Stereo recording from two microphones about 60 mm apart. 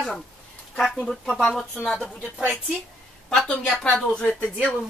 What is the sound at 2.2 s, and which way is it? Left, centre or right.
Speech, right.